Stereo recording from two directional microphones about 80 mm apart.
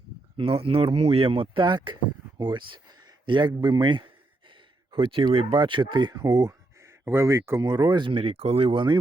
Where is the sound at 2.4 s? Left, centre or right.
Right.